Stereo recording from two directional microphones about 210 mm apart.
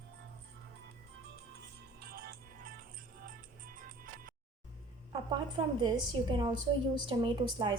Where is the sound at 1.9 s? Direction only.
45° right (ahead or behind).